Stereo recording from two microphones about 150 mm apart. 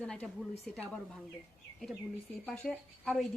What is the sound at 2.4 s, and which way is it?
Speech, 5° left (ahead or behind).